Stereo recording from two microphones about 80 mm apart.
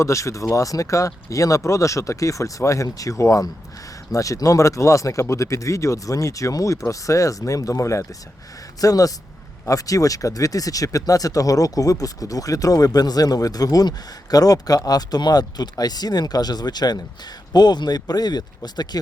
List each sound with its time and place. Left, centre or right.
0.0 s speech: left